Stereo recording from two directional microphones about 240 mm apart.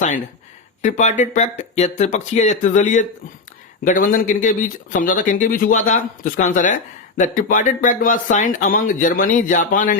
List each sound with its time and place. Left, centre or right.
0.8 s speech: left